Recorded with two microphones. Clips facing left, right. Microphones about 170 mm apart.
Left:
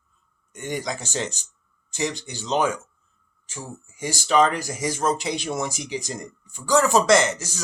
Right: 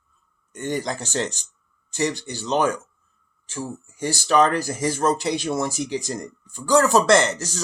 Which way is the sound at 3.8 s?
15° left (ahead or behind).